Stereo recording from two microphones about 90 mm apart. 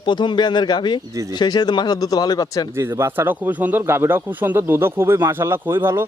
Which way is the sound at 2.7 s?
30° right (ahead or behind).